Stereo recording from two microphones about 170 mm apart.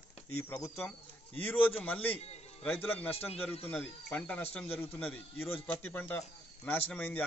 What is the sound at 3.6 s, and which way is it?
A man's voice, 10° left (ahead or behind).